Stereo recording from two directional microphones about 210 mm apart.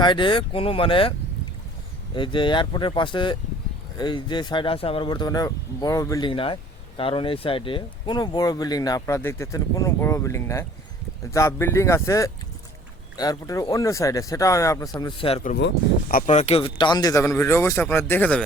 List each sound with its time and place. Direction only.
0.0 s speech: 20° left (ahead or behind)
2.1 s speech: 25° left (ahead or behind)
15.5 s speech: 50° left (ahead or behind); by 18.4 s 5° left (ahead or behind)